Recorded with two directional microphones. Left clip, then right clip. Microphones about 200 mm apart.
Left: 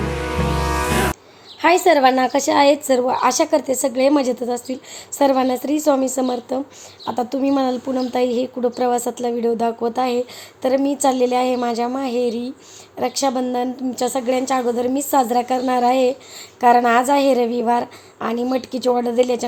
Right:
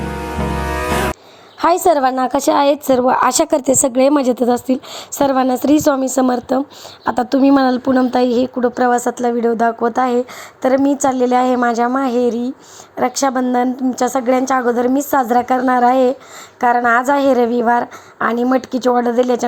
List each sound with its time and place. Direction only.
0.5 s music: centre (ahead or behind)
1.6 s a woman's voice: 25° right (ahead or behind)